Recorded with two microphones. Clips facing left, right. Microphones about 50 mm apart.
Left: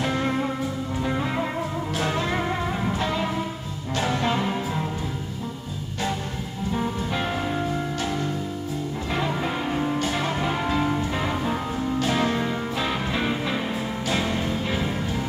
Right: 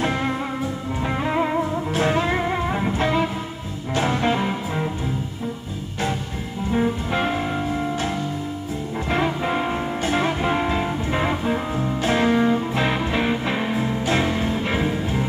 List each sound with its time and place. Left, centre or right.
0.0 s music: right
6.7 s music: right
9.1 s music: right